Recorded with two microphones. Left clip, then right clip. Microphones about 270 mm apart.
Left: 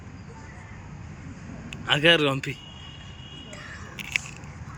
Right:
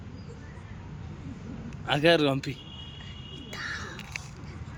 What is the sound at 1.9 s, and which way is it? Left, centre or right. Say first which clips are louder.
Speech: left 3 dB; centre.